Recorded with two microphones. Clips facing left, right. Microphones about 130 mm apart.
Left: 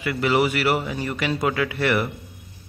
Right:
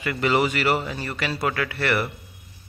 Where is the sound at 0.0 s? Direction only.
5° left (ahead or behind).